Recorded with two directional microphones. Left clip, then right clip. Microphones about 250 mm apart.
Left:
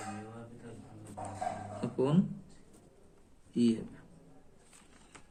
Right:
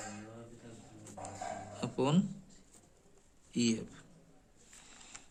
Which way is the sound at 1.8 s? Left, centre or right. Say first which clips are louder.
Left 1 dB; right.